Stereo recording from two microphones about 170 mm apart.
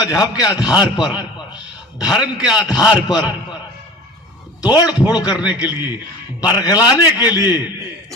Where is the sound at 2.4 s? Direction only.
5° right (ahead or behind).